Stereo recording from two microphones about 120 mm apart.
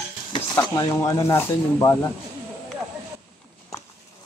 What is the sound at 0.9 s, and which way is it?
Speech, 25° left (ahead or behind).